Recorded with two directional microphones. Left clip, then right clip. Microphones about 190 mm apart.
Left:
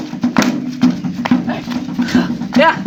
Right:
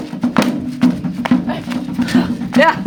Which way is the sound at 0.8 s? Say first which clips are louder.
Even; 25° right (ahead or behind).